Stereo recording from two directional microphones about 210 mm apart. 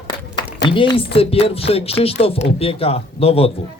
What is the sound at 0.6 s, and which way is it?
A woman's voice, 20° left (ahead or behind).